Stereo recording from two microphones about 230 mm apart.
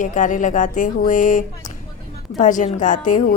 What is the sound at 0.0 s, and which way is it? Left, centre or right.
Speech, left.